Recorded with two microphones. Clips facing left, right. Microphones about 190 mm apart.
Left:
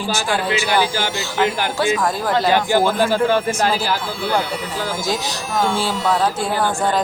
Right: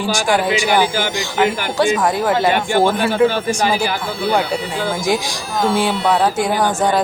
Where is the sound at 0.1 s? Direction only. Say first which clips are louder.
Right 4 dB; 15° right (ahead or behind).